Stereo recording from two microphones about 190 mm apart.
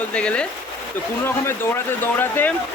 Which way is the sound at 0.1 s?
5° left (ahead or behind).